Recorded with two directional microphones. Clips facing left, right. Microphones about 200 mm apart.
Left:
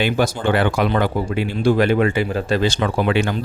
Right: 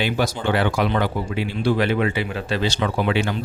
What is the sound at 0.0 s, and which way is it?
Speech, 50° left (ahead or behind).